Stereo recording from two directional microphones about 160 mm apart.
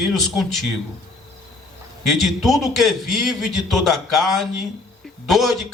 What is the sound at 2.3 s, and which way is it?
A man's voice, centre (ahead or behind).